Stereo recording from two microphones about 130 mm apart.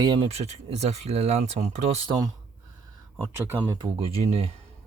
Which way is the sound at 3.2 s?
15° right (ahead or behind).